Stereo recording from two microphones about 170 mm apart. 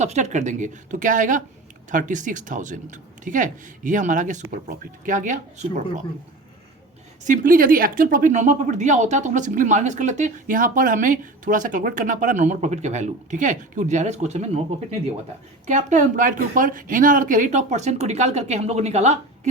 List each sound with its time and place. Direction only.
0.0 s speech: 45° right (ahead or behind)
7.3 s speech: 55° right (ahead or behind); by 14.6 s 40° right (ahead or behind)
15.6 s speech: 45° right (ahead or behind)